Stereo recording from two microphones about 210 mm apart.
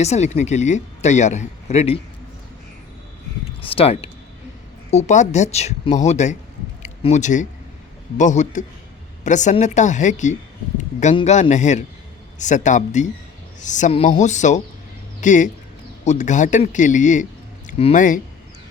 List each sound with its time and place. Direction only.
0.0 s speech: 30° left (ahead or behind)
3.6 s speech: 25° left (ahead or behind)